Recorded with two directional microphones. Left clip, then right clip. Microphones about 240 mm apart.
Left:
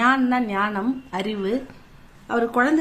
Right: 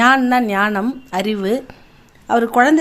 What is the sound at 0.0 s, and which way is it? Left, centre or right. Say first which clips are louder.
A woman's voice: right 7 dB; right.